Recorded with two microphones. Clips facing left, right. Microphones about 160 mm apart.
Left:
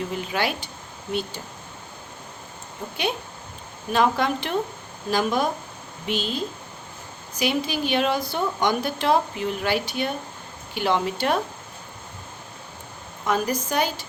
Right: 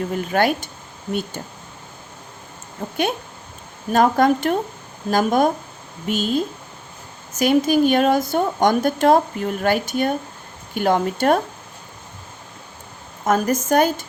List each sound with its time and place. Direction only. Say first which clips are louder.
0.1 s a woman's voice: right 7 dB; 50° right (ahead or behind)
2.8 s a woman's voice: right 5 dB; 50° right (ahead or behind)
13.2 s a woman's voice: right 5 dB; 45° right (ahead or behind)